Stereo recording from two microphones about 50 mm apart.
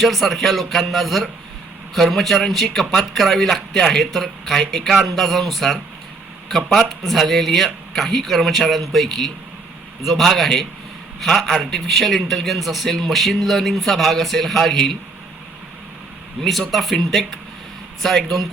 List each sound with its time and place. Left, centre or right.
0.0 s a man's voice: centre
16.4 s a man's voice: centre